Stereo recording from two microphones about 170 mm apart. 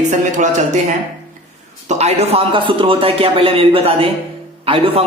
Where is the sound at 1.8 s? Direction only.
40° right (ahead or behind).